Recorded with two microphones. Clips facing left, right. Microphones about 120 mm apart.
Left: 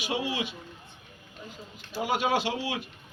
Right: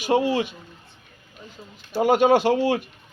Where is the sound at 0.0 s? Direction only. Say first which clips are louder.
Right 10 dB; 50° right (ahead or behind).